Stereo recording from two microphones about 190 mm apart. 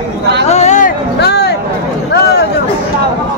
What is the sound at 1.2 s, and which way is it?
Speech, 60° left (ahead or behind).